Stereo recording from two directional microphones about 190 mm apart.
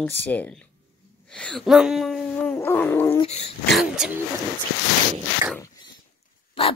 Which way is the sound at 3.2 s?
30° left (ahead or behind).